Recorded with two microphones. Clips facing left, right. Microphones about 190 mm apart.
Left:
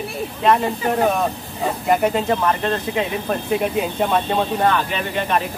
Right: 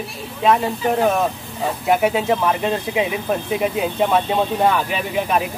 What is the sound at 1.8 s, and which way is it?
Speech, 5° right (ahead or behind).